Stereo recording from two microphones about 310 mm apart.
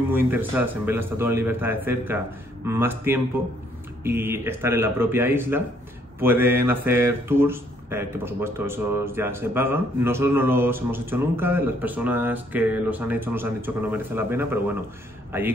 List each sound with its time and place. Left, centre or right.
0.1 s speech: centre